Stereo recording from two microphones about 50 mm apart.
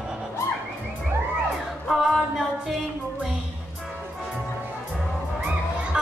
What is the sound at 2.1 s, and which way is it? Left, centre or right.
Music, centre.